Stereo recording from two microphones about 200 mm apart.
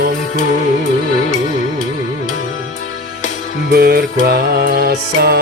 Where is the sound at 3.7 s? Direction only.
50° right (ahead or behind).